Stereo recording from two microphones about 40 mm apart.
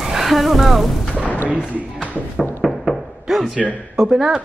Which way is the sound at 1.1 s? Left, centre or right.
Left.